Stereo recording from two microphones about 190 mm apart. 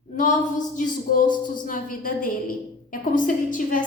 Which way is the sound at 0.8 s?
45° left (ahead or behind).